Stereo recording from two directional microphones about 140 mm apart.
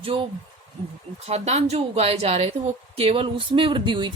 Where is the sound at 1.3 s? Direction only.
50° right (ahead or behind).